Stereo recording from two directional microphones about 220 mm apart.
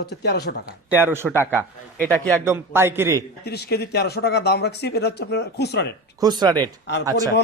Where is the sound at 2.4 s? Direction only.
10° right (ahead or behind).